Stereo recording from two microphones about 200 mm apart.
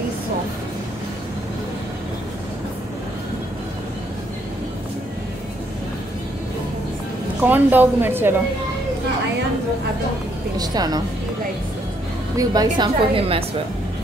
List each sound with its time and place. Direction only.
7.4 s a woman's voice: 10° right (ahead or behind)
10.6 s a woman's voice: 20° right (ahead or behind)
12.4 s a woman's voice: 20° right (ahead or behind)